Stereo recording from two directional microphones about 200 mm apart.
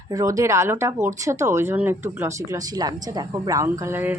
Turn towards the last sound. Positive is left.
turn(degrees=-10)  # may be behind; listen again after turning